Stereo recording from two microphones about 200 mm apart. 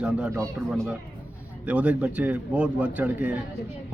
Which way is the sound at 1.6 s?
5° right (ahead or behind).